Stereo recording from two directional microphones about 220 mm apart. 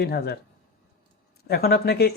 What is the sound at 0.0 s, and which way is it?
Speech, 45° left (ahead or behind).